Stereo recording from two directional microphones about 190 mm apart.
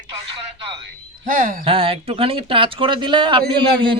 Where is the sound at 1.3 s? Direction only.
50° right (ahead or behind).